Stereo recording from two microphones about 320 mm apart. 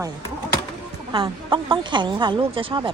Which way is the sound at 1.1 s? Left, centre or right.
Centre.